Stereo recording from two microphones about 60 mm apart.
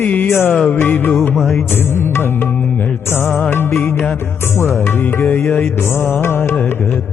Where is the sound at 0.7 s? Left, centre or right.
Left.